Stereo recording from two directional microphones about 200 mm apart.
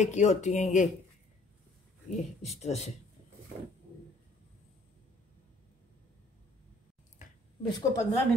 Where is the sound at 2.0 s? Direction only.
35° left (ahead or behind).